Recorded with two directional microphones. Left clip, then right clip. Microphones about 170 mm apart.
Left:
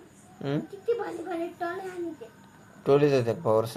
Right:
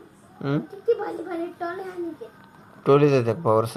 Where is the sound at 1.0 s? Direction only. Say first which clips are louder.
Right 3 dB; 15° left (ahead or behind).